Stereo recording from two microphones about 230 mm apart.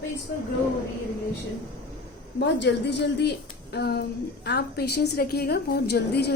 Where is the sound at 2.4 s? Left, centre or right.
Left.